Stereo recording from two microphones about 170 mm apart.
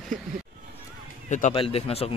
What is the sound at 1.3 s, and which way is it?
Speech, 45° left (ahead or behind).